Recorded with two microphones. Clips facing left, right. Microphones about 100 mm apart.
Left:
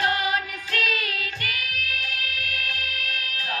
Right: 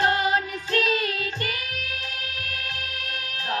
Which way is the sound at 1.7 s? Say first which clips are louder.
Left 2 dB; 55° left (ahead or behind).